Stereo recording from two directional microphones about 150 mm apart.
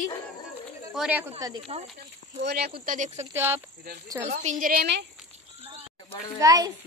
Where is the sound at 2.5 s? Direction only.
90° right; by 3.3 s 50° right (ahead or behind).